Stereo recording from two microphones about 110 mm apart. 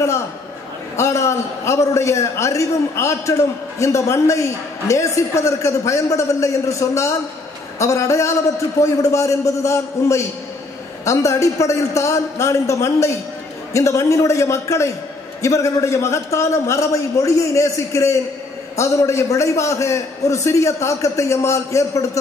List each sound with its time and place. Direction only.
0.9 s a man's voice: 25° left (ahead or behind)